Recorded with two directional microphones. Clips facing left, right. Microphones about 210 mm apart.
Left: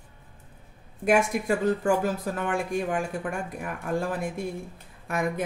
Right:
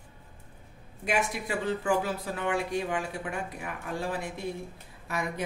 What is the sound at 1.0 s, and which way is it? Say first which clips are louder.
Speech: left 7 dB; 50° left (ahead or behind).